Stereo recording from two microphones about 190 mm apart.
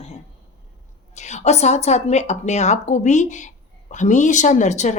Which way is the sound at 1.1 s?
35° left (ahead or behind).